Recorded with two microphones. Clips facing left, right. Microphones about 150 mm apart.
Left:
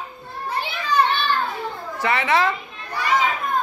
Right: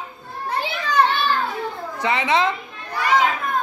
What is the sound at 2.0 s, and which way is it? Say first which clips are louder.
Speech: even; 20° right (ahead or behind).